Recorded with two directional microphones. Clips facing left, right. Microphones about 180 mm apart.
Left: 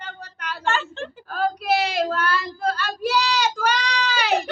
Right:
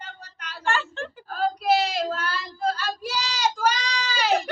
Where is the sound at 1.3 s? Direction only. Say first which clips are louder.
Even; 65° left (ahead or behind).